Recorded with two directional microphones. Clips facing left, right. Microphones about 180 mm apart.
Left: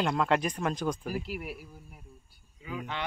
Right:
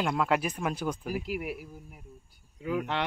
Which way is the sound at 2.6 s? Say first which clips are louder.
Right 6 dB; 70° right (ahead or behind).